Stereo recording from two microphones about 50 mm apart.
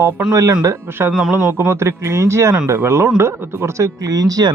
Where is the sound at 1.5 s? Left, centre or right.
Right.